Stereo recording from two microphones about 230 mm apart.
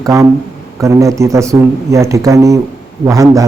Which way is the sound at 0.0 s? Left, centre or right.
Centre.